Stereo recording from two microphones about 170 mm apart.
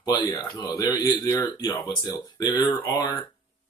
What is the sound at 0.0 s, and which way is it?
Speech, 20° left (ahead or behind).